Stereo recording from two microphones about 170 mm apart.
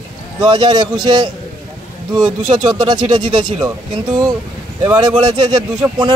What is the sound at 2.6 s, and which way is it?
Speech, 25° right (ahead or behind).